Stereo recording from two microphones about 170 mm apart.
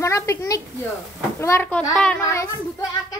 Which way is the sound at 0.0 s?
15° left (ahead or behind).